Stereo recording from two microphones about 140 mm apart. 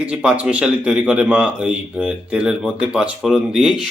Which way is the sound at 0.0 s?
10° right (ahead or behind).